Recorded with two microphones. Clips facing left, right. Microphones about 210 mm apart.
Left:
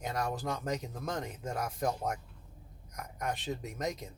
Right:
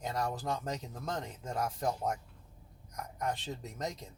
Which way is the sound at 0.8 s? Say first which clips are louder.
Left 2 dB; 15° left (ahead or behind).